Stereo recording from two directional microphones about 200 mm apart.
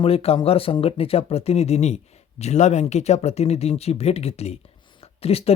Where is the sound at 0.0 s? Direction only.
30° left (ahead or behind).